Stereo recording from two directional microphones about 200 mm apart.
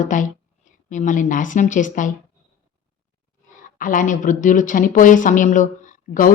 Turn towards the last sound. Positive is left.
turn(degrees=40)  # may be behind; listen again after turning